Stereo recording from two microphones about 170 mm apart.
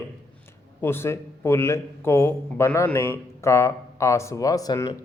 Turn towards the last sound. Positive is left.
turn(degrees=20)  # may be behind; listen again after turning